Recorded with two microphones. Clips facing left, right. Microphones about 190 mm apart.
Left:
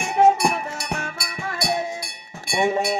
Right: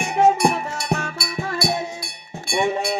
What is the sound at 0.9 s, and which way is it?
Music, 40° right (ahead or behind).